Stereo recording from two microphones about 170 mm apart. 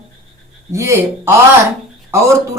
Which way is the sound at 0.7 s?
15° right (ahead or behind).